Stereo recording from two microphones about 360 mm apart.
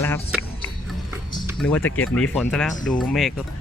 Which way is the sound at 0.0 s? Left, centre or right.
Centre.